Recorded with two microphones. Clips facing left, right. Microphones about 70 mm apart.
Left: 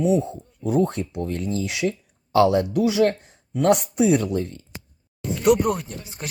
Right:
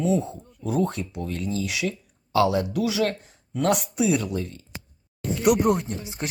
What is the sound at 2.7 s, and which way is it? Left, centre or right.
Speech, left.